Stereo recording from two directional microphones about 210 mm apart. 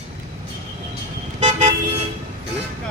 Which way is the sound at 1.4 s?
30° right (ahead or behind).